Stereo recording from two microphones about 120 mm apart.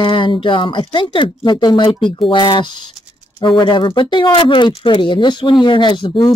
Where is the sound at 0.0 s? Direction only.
45° left (ahead or behind).